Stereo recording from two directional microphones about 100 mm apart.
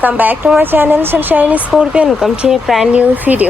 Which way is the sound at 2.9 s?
15° right (ahead or behind).